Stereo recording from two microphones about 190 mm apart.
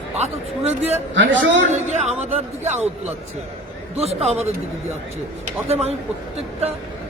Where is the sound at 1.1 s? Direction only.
75° right (ahead or behind).